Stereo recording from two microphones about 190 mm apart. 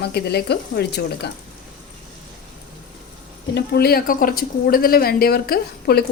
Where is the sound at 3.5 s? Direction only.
55° left (ahead or behind).